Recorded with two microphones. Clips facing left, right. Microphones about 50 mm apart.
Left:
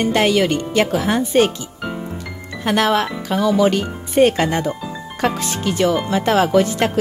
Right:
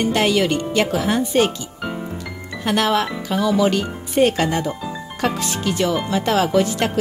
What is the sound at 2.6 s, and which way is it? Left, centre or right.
Speech, left.